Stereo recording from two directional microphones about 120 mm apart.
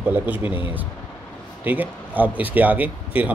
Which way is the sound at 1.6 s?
15° right (ahead or behind).